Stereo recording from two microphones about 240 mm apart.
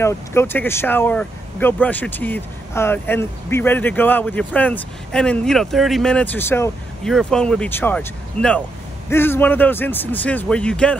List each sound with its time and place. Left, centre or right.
0.0 s speech: centre